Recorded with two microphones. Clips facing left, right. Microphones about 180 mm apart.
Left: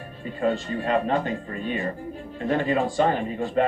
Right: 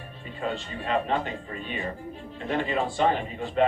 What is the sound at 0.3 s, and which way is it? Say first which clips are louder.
Speech: left 7 dB; 45° left (ahead or behind).